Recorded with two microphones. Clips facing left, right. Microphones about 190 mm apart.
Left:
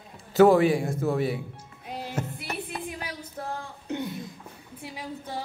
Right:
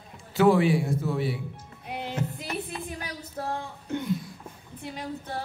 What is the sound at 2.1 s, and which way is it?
Music, 45° left (ahead or behind).